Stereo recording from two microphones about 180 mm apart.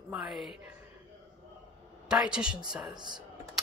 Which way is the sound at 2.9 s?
25° right (ahead or behind).